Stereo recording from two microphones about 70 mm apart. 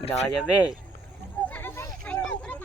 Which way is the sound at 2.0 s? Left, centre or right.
Centre.